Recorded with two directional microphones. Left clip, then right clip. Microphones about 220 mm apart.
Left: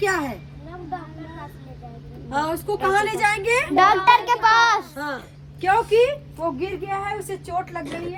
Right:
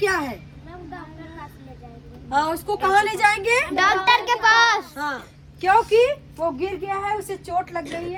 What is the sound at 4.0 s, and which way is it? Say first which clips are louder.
Speech: left 2 dB; 25° left (ahead or behind).